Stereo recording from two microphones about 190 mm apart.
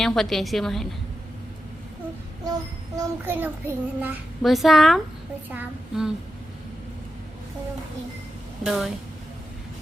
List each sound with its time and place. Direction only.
0.0 s a woman's voice: centre (ahead or behind)
2.5 s child singing: 15° right (ahead or behind); by 4.9 s centre (ahead or behind)
5.5 s a woman's voice: 5° right (ahead or behind)
8.6 s a woman's voice: centre (ahead or behind)